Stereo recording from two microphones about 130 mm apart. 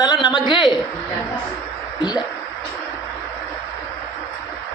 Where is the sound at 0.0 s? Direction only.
30° left (ahead or behind).